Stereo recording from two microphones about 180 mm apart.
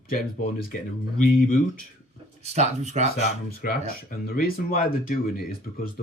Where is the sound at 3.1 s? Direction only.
50° left (ahead or behind).